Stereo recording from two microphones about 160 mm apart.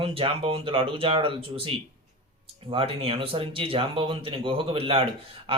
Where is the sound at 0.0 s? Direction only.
35° right (ahead or behind).